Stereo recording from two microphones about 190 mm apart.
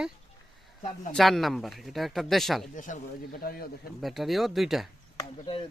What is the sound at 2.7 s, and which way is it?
Speech, 45° left (ahead or behind).